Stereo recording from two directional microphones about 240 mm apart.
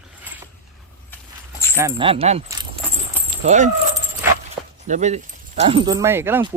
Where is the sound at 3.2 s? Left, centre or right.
Right.